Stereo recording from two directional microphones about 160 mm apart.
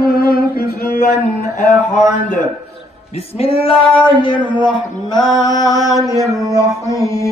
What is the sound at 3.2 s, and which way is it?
Male singing, 40° left (ahead or behind).